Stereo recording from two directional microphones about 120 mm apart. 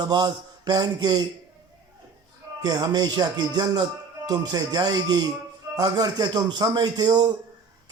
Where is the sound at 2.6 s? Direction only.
35° right (ahead or behind).